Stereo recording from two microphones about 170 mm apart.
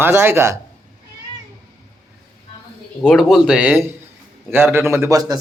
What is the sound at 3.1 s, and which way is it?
Speech, centre (ahead or behind).